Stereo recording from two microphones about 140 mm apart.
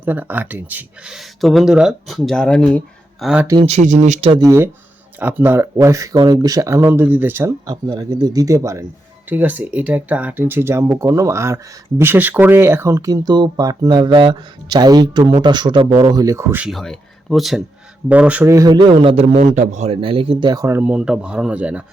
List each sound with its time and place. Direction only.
0.0 s speech: 15° right (ahead or behind)
3.6 s speech: 55° right (ahead or behind)
4.3 s speech: 30° right (ahead or behind)
5.2 s speech: 15° right (ahead or behind)
9.3 s a man's voice: 10° right (ahead or behind)
16.6 s speech: 5° left (ahead or behind)
18.7 s a man's voice: 40° right (ahead or behind)
19.4 s a man's voice: 55° right (ahead or behind)
20.5 s speech: 20° right (ahead or behind)